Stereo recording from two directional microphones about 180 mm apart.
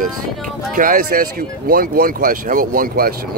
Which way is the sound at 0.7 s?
50° right (ahead or behind).